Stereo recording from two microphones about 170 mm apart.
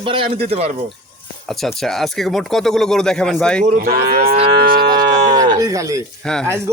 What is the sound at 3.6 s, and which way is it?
Speech, 60° right (ahead or behind).